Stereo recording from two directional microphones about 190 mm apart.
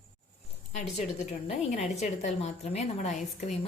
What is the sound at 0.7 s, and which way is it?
A woman's voice, 35° left (ahead or behind).